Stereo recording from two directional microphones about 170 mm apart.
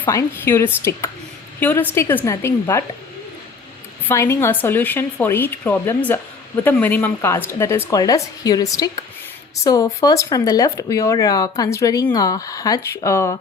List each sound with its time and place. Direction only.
0.0 s speech: 15° left (ahead or behind)
4.0 s speech: 15° left (ahead or behind)